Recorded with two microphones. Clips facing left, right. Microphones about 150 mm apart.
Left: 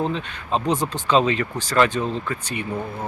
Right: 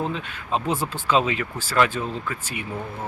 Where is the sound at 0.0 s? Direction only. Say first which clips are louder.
Left 3 dB; 5° right (ahead or behind).